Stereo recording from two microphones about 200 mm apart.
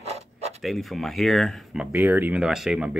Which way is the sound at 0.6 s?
Centre (ahead or behind).